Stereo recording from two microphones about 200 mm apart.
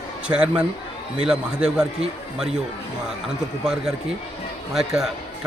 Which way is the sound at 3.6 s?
5° right (ahead or behind).